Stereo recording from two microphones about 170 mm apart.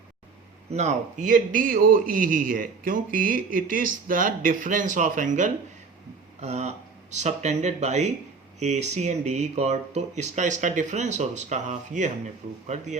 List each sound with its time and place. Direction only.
0.7 s a man's voice: 45° right (ahead or behind)